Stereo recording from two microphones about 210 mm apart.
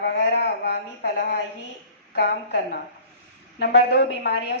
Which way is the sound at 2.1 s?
55° left (ahead or behind).